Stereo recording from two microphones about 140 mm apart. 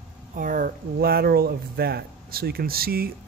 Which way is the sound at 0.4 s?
75° right (ahead or behind).